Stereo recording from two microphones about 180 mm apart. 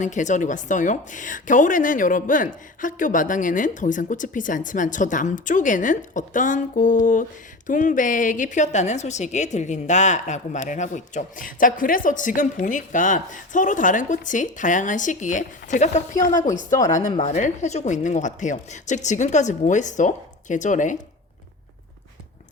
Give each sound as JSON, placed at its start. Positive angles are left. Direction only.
{"t": 0.0, "sound": "a woman's voice", "side_deg": 45}